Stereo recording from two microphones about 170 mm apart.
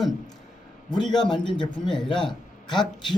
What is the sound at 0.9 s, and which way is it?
Speech, 25° left (ahead or behind).